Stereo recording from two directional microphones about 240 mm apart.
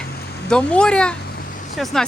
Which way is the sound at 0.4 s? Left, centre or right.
Centre.